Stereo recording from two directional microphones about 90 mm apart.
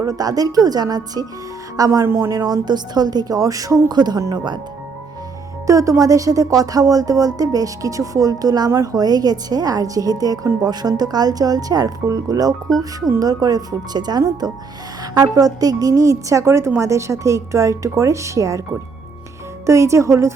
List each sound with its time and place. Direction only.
0.0 s a woman's voice: 45° right (ahead or behind)
2.0 s speech: 30° right (ahead or behind)
2.4 s speech: 50° right (ahead or behind)
5.6 s a woman's voice: 35° right (ahead or behind)
19.6 s a woman's voice: 35° right (ahead or behind)